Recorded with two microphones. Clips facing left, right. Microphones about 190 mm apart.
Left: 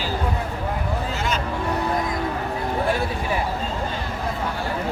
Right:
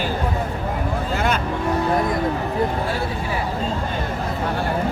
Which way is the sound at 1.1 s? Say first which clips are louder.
Right 8 dB; 55° right (ahead or behind).